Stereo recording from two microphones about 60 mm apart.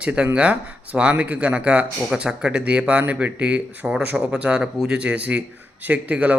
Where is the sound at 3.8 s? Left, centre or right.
Centre.